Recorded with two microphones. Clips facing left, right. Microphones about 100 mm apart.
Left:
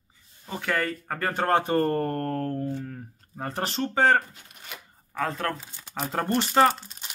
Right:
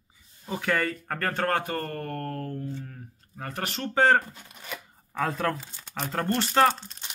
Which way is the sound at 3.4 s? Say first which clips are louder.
Left 4 dB; 30° left (ahead or behind).